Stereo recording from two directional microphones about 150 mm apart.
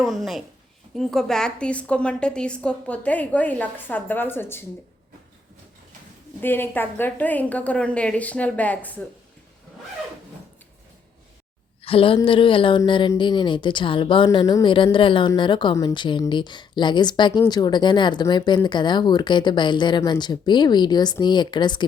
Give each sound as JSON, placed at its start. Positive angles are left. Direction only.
{"t": 0.0, "sound": "a woman's voice", "side_deg": 0}
{"t": 6.4, "sound": "a woman's voice", "side_deg": 15}
{"t": 11.8, "sound": "speech", "side_deg": 40}